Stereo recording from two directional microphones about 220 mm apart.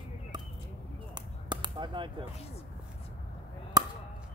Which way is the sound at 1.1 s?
20° right (ahead or behind).